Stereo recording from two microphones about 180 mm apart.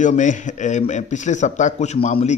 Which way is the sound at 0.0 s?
45° left (ahead or behind).